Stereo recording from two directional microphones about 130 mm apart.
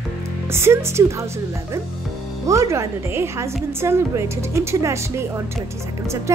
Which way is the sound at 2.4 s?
25° right (ahead or behind).